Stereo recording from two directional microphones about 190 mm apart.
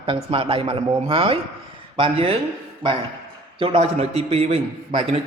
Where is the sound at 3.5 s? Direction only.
30° right (ahead or behind).